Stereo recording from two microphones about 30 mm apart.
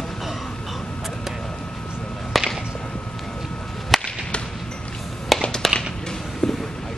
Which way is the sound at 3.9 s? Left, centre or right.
Centre.